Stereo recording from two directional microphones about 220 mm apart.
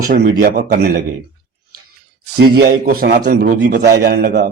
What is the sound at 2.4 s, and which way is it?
A man's voice, 45° right (ahead or behind).